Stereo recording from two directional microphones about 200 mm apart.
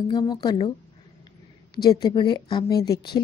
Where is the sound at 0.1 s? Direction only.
20° left (ahead or behind).